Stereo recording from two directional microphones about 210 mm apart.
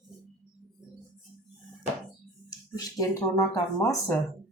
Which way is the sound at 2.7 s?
15° left (ahead or behind).